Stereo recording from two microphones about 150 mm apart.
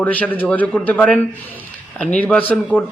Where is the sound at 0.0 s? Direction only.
10° left (ahead or behind).